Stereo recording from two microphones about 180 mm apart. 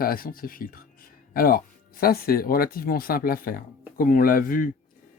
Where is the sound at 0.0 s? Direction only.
55° left (ahead or behind).